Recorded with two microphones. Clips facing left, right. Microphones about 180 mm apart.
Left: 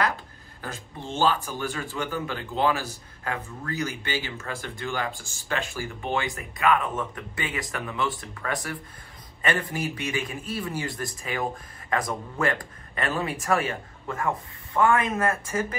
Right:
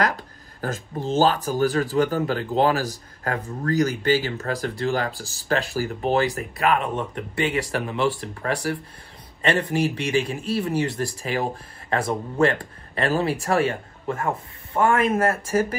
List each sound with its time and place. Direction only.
0.0 s a man's voice: 40° right (ahead or behind); by 14.8 s 25° right (ahead or behind)